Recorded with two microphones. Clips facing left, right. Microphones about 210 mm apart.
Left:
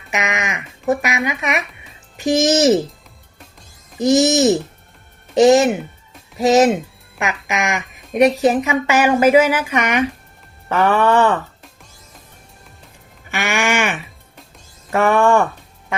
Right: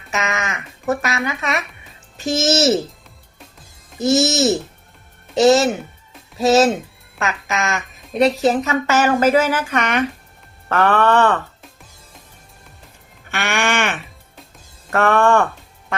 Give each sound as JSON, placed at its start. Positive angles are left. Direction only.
{"t": 0.1, "sound": "speech", "side_deg": 15}
{"t": 3.9, "sound": "speech", "side_deg": 15}
{"t": 13.3, "sound": "a sound", "side_deg": 10}
{"t": 14.8, "sound": "speech", "side_deg": 10}